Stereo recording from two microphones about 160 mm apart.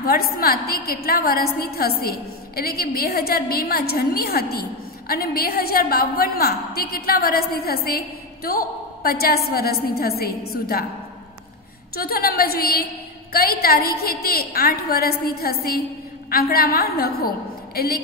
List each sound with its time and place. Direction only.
0.0 s a woman's voice: 70° left (ahead or behind)
11.9 s a woman's voice: 65° left (ahead or behind)